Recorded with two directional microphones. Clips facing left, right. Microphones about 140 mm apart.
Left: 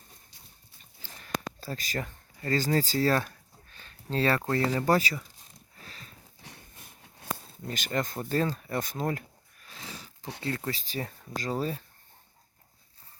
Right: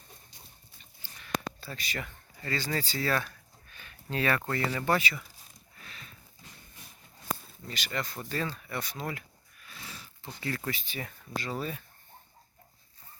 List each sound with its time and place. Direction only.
1.2 s a sound: 40° left (ahead or behind)
4.4 s speech: 35° left (ahead or behind)
5.8 s a sound: 35° left (ahead or behind)
7.7 s speech: 45° left (ahead or behind)
10.4 s speech: 25° left (ahead or behind)
10.8 s speech: 35° left (ahead or behind)